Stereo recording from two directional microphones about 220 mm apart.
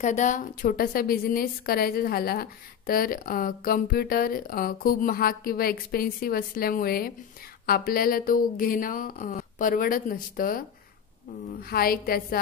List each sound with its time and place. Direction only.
0.0 s a woman's voice: 35° left (ahead or behind)
11.7 s a woman's voice: 40° left (ahead or behind)